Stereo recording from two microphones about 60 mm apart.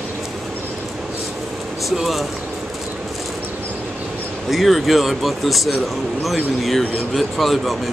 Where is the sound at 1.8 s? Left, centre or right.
Centre.